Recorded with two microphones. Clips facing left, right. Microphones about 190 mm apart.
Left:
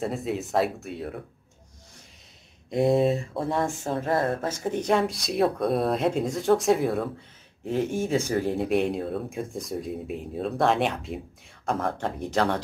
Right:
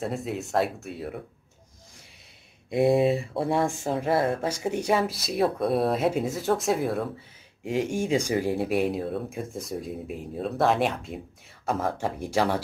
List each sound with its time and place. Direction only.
0.0 s speech: centre (ahead or behind)
2.7 s speech: 5° right (ahead or behind)
7.6 s speech: 10° right (ahead or behind)